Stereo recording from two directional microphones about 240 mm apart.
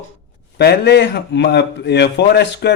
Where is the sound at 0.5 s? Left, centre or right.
Left.